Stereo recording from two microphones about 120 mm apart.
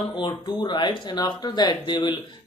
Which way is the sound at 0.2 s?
40° left (ahead or behind).